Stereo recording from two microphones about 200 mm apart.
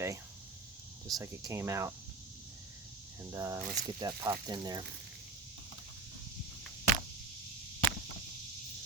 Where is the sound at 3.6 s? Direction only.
45° right (ahead or behind).